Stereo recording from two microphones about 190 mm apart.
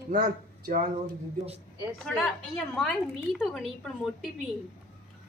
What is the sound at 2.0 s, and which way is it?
A woman's voice, centre (ahead or behind).